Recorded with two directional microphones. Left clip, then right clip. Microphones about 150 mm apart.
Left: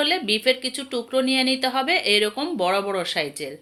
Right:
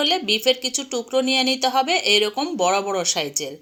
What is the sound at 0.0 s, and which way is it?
A woman's voice, 35° right (ahead or behind).